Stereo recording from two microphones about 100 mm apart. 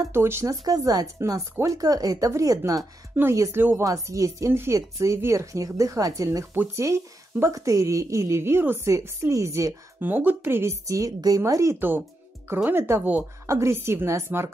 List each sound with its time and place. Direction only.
0.1 s a woman's voice: 25° right (ahead or behind)
0.7 s speech: 40° right (ahead or behind)
3.2 s a woman's voice: 25° right (ahead or behind)
6.5 s a woman's voice: 25° right (ahead or behind)
10.9 s a woman's voice: 35° right (ahead or behind)